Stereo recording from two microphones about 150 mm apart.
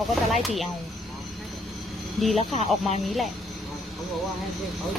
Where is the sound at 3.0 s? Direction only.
Centre (ahead or behind).